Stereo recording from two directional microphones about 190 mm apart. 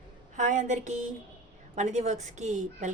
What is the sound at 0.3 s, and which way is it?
A woman's voice, 40° right (ahead or behind).